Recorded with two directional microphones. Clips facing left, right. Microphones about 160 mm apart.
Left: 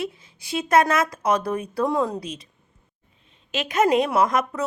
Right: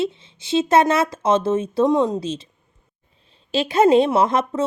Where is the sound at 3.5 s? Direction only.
30° right (ahead or behind).